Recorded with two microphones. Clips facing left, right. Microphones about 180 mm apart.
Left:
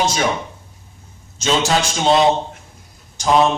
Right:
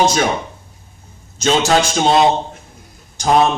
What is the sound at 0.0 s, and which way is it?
Speech, 45° right (ahead or behind).